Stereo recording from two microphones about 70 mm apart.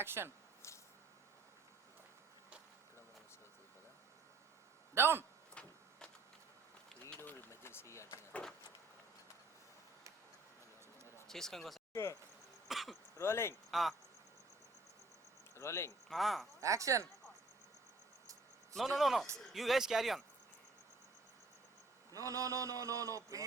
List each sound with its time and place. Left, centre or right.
0.0 s speech: right
4.9 s speech: right
5.6 s printer: centre
7.5 s a sound: left
11.3 s speech: centre
12.6 s throat clearing: centre
13.1 s speech: left
13.7 s speech: centre
15.5 s speech: left
16.0 s speech: centre
16.6 s speech: right
18.7 s speech: centre
22.1 s speech: right